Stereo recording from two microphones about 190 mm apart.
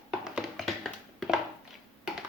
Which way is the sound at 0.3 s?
Centre (ahead or behind).